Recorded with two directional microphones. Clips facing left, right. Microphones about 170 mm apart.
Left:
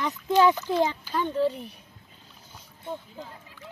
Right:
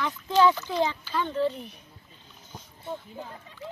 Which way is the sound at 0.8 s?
10° left (ahead or behind).